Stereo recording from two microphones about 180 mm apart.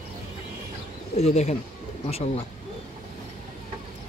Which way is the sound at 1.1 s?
35° left (ahead or behind).